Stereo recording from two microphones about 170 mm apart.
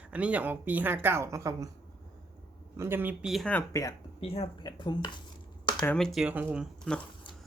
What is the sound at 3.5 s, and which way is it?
Speech, 20° left (ahead or behind).